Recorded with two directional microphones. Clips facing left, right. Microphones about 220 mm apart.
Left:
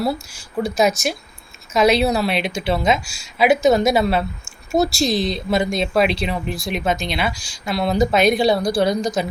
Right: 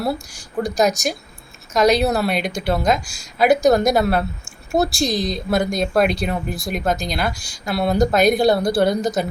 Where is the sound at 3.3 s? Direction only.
Centre (ahead or behind).